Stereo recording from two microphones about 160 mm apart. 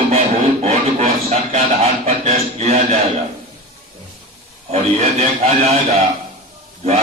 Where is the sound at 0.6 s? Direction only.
40° right (ahead or behind).